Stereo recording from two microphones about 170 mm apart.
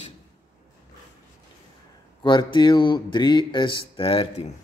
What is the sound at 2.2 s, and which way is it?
Speech, 25° left (ahead or behind).